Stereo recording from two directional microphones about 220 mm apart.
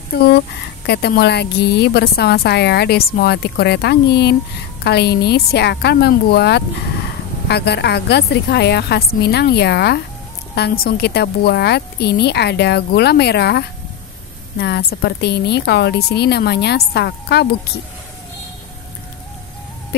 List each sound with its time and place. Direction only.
0.8 s a woman's voice: 50° left (ahead or behind)